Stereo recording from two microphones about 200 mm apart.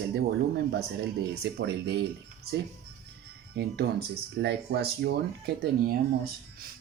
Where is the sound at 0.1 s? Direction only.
55° right (ahead or behind).